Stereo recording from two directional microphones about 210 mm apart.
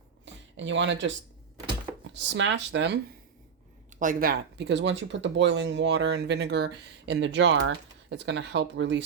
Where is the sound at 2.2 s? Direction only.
60° right (ahead or behind).